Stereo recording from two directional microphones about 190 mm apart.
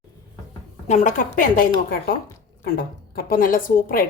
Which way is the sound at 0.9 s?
40° left (ahead or behind).